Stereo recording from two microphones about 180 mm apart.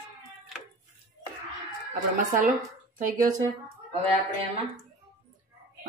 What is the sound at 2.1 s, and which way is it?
Speech, 45° right (ahead or behind).